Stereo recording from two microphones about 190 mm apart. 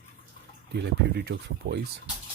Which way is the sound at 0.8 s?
60° right (ahead or behind).